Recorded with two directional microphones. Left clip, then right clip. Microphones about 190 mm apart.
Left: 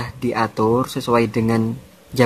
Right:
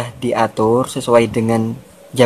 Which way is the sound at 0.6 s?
50° left (ahead or behind).